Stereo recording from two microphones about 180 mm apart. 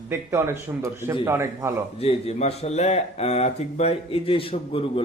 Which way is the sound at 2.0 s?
35° left (ahead or behind).